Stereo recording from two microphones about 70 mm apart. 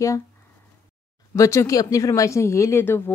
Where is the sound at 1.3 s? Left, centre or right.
Left.